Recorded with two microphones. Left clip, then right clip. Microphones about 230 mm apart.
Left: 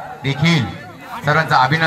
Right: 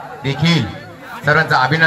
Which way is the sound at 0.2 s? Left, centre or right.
Centre.